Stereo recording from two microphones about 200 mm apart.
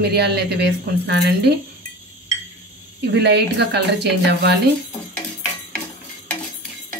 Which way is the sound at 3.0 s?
55° right (ahead or behind).